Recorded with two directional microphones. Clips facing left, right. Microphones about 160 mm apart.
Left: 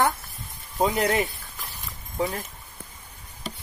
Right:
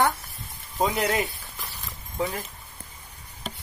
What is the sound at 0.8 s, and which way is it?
Speech, 20° left (ahead or behind).